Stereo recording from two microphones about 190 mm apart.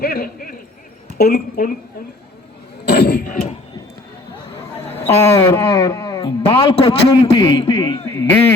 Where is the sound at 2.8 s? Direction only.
60° left (ahead or behind).